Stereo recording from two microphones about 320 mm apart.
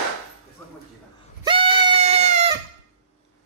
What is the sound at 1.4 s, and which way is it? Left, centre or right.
Goat, centre.